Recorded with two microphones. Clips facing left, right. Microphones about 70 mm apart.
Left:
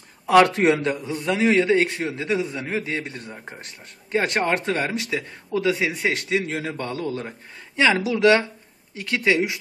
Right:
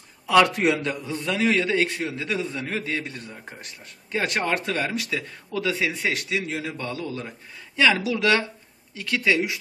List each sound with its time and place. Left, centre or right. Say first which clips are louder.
0.7 s a man's voice: left 3 dB; left
7.2 s a man's voice: left 2 dB; left